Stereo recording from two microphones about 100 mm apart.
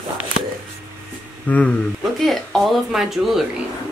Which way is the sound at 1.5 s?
10° left (ahead or behind).